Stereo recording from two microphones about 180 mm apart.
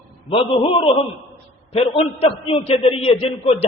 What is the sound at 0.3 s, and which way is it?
A man's voice, 30° left (ahead or behind).